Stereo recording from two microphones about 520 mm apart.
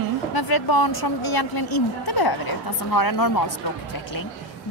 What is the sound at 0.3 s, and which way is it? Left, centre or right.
A woman's voice, left.